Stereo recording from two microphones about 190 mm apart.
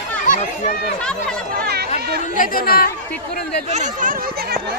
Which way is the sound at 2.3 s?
45° left (ahead or behind).